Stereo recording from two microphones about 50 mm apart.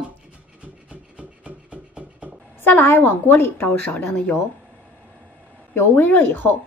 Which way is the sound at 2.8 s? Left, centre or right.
Left.